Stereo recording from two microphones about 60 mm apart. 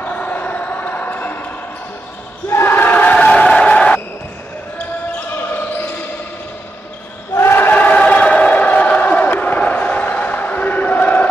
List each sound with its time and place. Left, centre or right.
0.0 s basketball bounce: left
2.5 s crowd: left; by 3.7 s centre
3.7 s a sound: left
5.3 s basketball bounce: left
7.3 s choir: left
7.6 s crowd: left